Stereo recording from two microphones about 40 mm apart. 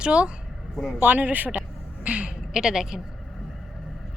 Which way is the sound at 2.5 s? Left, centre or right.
Centre.